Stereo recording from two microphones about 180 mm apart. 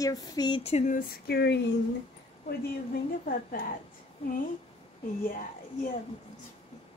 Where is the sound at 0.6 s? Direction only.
35° left (ahead or behind); by 1.7 s 65° left (ahead or behind).